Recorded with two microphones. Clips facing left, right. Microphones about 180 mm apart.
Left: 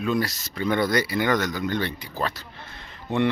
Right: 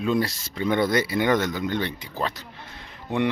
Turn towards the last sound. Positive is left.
turn(degrees=-10)  # may be behind; listen again after turning